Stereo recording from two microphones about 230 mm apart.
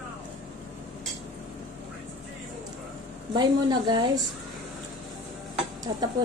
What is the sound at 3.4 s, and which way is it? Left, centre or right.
Speech, centre.